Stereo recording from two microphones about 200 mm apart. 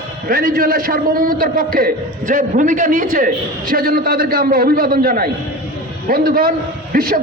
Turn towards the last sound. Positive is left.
turn(degrees=-45)  # may be behind; listen again after turning